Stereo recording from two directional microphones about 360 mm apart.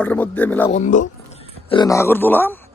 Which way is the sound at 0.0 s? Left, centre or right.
Centre.